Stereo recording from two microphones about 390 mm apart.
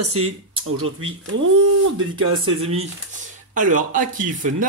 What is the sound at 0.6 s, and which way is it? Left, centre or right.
Speech, right.